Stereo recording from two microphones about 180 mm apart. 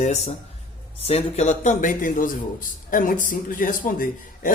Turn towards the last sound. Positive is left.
turn(degrees=50)  # may be behind; listen again after turning